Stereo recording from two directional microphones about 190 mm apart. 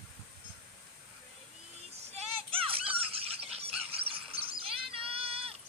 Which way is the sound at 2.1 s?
30° right (ahead or behind).